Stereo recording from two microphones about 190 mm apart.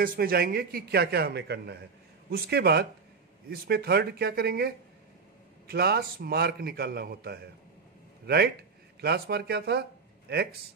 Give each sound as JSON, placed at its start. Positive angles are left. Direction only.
{"t": 0.0, "sound": "a man's voice", "side_deg": -50}
{"t": 9.0, "sound": "a man's voice", "side_deg": -55}